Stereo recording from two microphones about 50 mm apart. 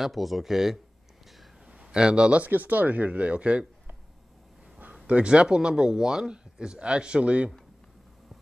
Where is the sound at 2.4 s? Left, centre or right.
Right.